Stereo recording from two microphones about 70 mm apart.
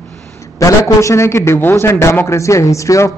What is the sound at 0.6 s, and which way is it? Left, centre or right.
A man's voice, left.